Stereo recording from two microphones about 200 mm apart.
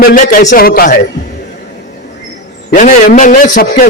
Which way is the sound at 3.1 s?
40° left (ahead or behind).